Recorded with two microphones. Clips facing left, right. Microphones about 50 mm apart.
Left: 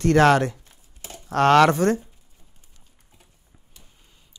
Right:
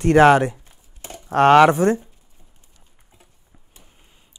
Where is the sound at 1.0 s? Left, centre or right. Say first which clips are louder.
Right 4 dB; right.